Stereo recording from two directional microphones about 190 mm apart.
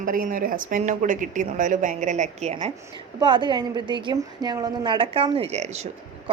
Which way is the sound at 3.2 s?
25° right (ahead or behind).